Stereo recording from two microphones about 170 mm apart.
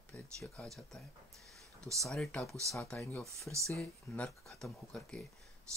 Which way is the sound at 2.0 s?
5° left (ahead or behind).